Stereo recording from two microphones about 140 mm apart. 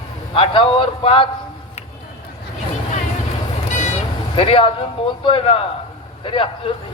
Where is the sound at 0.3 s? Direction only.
40° left (ahead or behind).